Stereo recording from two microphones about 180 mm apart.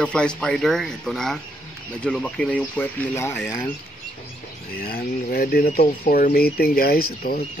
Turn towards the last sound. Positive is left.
turn(degrees=55)  # may be behind; listen again after turning